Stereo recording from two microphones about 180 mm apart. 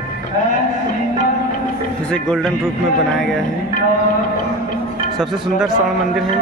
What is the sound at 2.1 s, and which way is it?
Speech, 5° left (ahead or behind).